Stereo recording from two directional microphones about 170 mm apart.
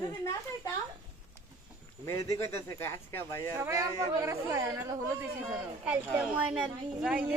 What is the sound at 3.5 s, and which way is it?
Speech, 15° right (ahead or behind).